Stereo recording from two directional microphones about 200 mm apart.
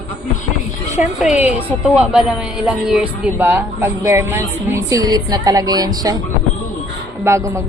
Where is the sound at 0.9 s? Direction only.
5° right (ahead or behind).